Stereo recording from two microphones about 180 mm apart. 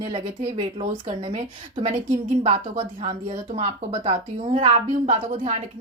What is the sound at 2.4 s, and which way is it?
A woman's voice, 35° right (ahead or behind).